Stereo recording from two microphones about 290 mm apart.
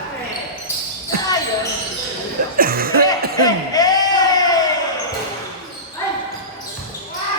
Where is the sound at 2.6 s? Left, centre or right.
Right.